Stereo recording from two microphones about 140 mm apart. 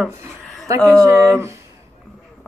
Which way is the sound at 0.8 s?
5° left (ahead or behind).